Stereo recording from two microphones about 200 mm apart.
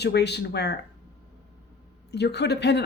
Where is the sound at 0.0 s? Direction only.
55° left (ahead or behind).